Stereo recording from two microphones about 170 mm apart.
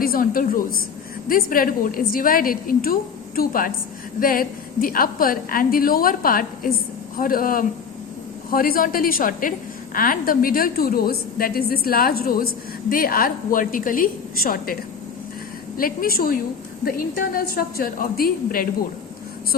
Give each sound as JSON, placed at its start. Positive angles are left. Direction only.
{"t": 0.0, "sound": "a woman's voice", "side_deg": 55}
{"t": 15.8, "sound": "a woman's voice", "side_deg": 60}